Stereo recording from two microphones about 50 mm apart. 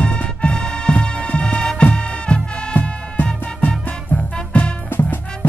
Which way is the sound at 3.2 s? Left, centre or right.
Left.